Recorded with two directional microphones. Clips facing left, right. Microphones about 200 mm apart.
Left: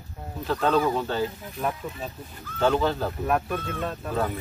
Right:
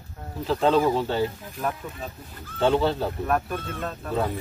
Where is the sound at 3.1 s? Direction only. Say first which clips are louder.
Even; 5° left (ahead or behind).